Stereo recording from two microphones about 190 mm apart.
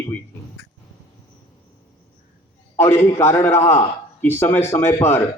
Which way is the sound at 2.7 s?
15° left (ahead or behind).